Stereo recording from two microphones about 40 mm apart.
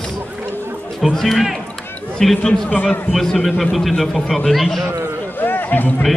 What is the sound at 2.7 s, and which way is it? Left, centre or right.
Speech, left.